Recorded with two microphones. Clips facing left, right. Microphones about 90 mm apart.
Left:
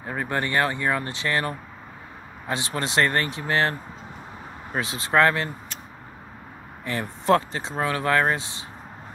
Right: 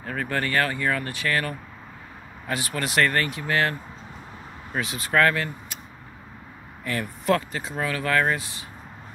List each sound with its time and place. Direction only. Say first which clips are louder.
0.0 s speech: even; 20° left (ahead or behind)
4.7 s speech: left 2 dB; 30° left (ahead or behind)
6.8 s speech: even; 25° left (ahead or behind)